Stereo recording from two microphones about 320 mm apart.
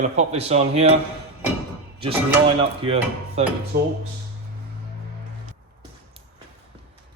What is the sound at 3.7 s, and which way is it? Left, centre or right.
Speech, right.